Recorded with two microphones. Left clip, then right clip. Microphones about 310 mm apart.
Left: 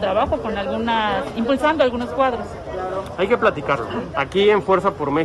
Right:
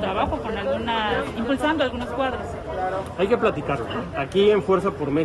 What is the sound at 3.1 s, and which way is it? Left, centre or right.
Speech, centre.